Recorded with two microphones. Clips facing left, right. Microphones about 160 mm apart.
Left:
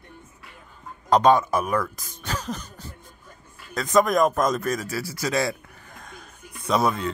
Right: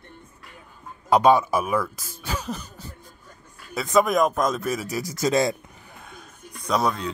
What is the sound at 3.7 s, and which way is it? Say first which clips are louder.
Speech: even; 5° right (ahead or behind).